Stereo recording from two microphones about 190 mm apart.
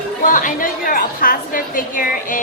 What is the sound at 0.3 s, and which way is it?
A woman's voice, 45° left (ahead or behind).